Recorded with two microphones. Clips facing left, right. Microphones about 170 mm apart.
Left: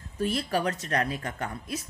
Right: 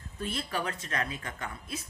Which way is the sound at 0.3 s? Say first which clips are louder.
Left 5 dB; 40° left (ahead or behind).